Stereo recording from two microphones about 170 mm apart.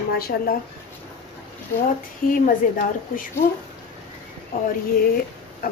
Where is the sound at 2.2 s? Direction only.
55° left (ahead or behind).